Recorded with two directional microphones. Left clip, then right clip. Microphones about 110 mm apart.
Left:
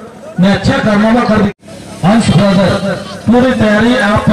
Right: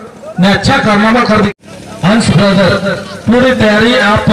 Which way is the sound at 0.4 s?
25° right (ahead or behind).